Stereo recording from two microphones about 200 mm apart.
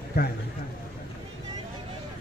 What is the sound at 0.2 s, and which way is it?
Speech, 50° left (ahead or behind).